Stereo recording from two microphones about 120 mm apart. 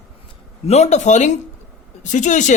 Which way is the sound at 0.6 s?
65° left (ahead or behind).